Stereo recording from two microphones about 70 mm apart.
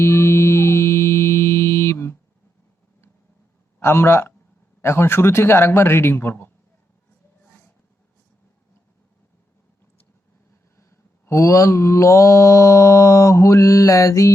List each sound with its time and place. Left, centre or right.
0.0 s a sound: left
3.8 s a man's voice: left
10.8 s mantra: left